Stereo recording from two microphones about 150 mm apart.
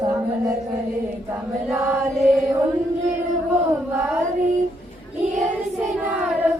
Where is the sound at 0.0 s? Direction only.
20° right (ahead or behind).